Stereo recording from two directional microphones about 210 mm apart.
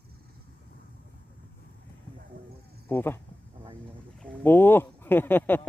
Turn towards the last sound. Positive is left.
turn(degrees=10)  # may be behind; listen again after turning